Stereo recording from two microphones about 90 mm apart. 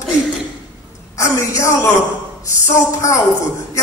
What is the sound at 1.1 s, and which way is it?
A man's voice, 35° left (ahead or behind).